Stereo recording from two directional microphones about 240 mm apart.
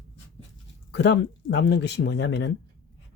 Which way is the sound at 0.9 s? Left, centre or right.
Left.